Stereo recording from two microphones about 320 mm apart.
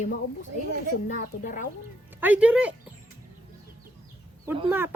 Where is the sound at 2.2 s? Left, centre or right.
Centre.